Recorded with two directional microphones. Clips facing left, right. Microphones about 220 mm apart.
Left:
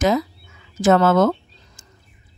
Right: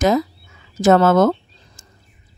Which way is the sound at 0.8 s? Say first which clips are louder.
Right 2 dB; 40° right (ahead or behind).